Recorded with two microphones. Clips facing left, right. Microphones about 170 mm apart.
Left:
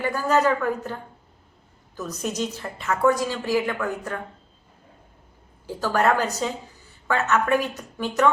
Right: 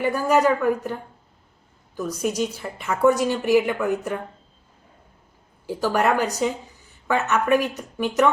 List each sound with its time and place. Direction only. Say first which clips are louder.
0.0 s a woman's voice: right 2 dB; 15° right (ahead or behind)
2.0 s a woman's voice: right 4 dB; 10° right (ahead or behind)
5.6 s a woman's voice: right 1 dB; 15° right (ahead or behind)